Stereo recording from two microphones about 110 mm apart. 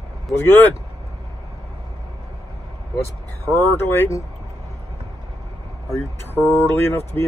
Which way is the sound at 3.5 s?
20° left (ahead or behind).